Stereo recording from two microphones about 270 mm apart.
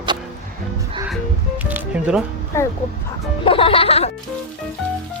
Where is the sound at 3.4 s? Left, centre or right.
Centre.